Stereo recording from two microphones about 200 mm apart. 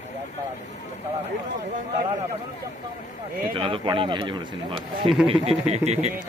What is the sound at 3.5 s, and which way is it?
A man's voice, 25° right (ahead or behind).